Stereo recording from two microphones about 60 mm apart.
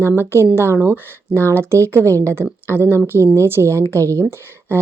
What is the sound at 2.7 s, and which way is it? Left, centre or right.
Speech, left.